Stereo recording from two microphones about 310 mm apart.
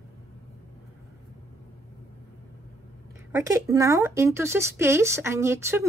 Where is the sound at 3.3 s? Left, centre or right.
Centre.